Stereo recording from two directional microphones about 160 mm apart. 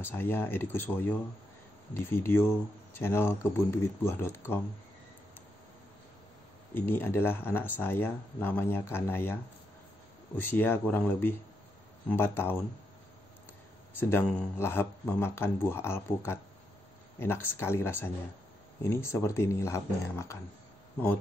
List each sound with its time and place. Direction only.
0.0 s speech: 15° left (ahead or behind)
6.7 s speech: 15° left (ahead or behind)
13.9 s speech: 15° left (ahead or behind)